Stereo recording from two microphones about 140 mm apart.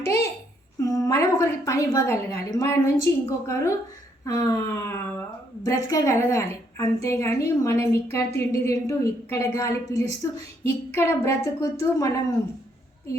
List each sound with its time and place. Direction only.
0.9 s a woman's voice: 25° left (ahead or behind)